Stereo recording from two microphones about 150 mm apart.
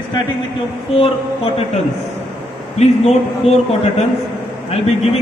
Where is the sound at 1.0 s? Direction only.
40° left (ahead or behind).